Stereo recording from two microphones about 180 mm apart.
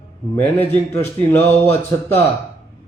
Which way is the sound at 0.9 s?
15° left (ahead or behind).